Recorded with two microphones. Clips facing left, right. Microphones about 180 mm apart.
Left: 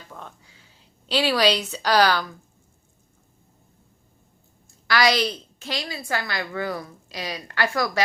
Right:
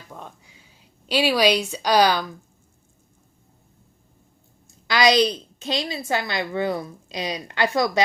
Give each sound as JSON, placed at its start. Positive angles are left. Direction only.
{"t": 0.1, "sound": "a sound", "side_deg": -15}
{"t": 1.0, "sound": "a woman's voice", "side_deg": -10}
{"t": 4.9, "sound": "a woman's voice", "side_deg": -20}